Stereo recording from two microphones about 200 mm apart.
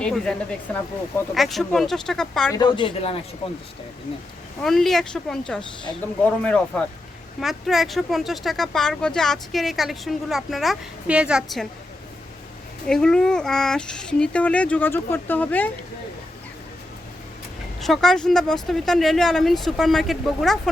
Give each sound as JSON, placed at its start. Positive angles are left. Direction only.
{"t": 0.0, "sound": "speech", "side_deg": 5}
{"t": 2.5, "sound": "speech", "side_deg": 20}
{"t": 4.6, "sound": "speech", "side_deg": 0}
{"t": 12.9, "sound": "speech", "side_deg": 5}
{"t": 17.7, "sound": "speech", "side_deg": 0}